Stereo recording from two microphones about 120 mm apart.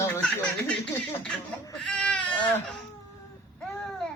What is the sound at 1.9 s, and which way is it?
Goat, 5° left (ahead or behind).